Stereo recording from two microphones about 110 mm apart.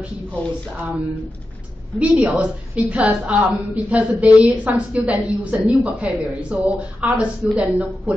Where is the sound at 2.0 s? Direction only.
5° right (ahead or behind).